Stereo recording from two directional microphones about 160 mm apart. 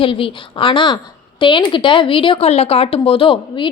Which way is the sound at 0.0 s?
35° left (ahead or behind).